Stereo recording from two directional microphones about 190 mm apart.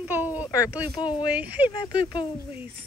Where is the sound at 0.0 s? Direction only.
10° right (ahead or behind).